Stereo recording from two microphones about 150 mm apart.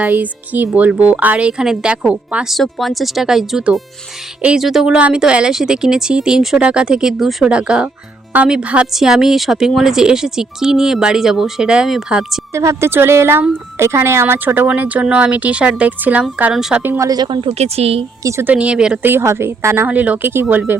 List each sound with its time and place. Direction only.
0.0 s speech: 10° right (ahead or behind)
12.5 s speech: 20° right (ahead or behind)
17.0 s speech: 25° right (ahead or behind); by 18.0 s 40° right (ahead or behind)
18.2 s speech: 20° right (ahead or behind)
18.5 s speech: 5° right (ahead or behind)